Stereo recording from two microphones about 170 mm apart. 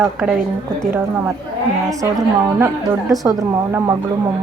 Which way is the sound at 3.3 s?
20° right (ahead or behind).